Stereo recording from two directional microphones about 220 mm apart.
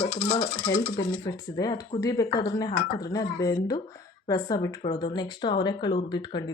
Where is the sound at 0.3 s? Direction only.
15° left (ahead or behind).